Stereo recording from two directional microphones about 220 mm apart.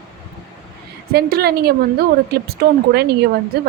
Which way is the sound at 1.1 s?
45° right (ahead or behind).